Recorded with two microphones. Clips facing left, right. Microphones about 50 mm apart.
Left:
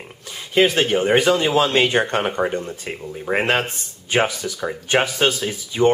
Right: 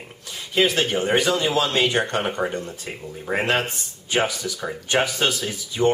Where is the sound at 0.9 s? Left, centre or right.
Left.